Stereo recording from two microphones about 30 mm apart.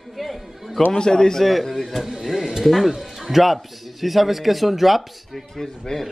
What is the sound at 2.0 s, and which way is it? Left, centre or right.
Speech, centre.